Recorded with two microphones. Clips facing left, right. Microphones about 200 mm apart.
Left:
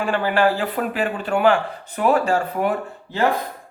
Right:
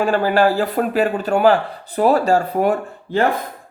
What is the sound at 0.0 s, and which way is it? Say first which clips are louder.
Speech: right 3 dB; 40° right (ahead or behind).